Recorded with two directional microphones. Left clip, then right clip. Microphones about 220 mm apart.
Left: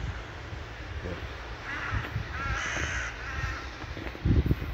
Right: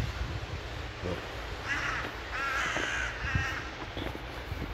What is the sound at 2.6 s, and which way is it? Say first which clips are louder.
Crow: right 1 dB; 20° left (ahead or behind).